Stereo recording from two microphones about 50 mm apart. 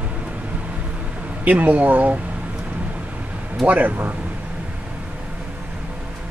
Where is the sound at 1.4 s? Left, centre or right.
Right.